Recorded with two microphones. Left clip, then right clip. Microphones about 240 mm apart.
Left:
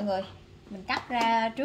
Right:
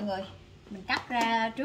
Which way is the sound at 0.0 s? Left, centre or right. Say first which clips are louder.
Left 4 dB; left.